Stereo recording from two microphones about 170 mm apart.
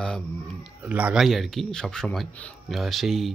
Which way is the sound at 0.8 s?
10° right (ahead or behind).